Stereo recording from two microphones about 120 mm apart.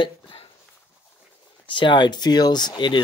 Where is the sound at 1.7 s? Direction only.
40° left (ahead or behind).